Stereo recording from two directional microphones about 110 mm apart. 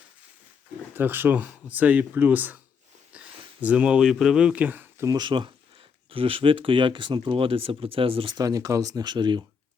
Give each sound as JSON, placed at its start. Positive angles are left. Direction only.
{"t": 0.9, "sound": "speech", "side_deg": -20}
{"t": 5.0, "sound": "speech", "side_deg": -40}
{"t": 6.1, "sound": "speech", "side_deg": -55}
{"t": 8.4, "sound": "speech", "side_deg": -30}